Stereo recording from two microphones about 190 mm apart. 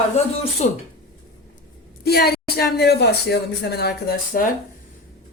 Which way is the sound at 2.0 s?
55° left (ahead or behind).